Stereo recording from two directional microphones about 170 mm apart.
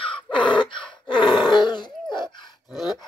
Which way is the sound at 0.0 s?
30° left (ahead or behind).